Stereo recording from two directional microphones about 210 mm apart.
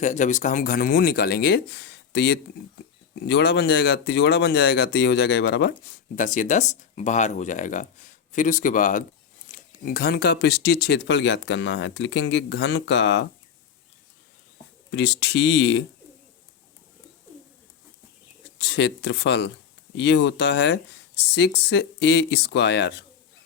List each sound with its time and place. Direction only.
0.0 s speech: 35° left (ahead or behind); by 6.0 s 55° left (ahead or behind)
6.1 s speech: 35° left (ahead or behind); by 13.2 s 60° left (ahead or behind)
14.8 s speech: 55° left (ahead or behind)
18.6 s speech: 55° left (ahead or behind)